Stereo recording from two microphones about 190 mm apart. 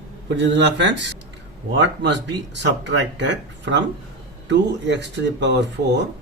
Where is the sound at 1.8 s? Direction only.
65° right (ahead or behind).